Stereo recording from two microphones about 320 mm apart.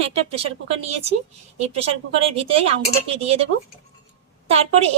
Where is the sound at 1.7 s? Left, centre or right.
Centre.